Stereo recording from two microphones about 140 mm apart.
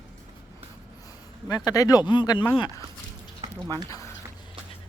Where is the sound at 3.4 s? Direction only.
30° right (ahead or behind).